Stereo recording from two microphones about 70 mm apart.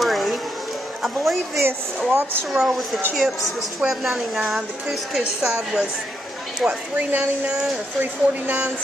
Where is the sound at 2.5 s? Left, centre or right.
Centre.